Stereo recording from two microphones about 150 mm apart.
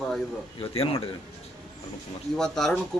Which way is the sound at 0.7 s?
40° left (ahead or behind).